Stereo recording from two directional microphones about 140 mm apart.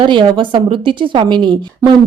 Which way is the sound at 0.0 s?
35° right (ahead or behind).